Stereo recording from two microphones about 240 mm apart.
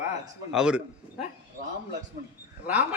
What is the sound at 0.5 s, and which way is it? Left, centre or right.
Speech, centre.